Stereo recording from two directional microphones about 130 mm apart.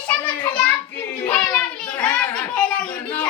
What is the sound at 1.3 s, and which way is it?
A child's voice, 10° left (ahead or behind).